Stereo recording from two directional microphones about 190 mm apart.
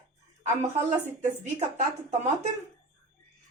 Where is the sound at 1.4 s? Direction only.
35° right (ahead or behind).